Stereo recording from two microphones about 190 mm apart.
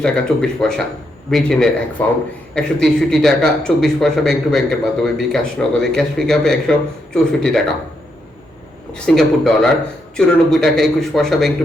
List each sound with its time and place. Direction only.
0.0 s a man's voice: 5° left (ahead or behind)
8.9 s a man's voice: centre (ahead or behind)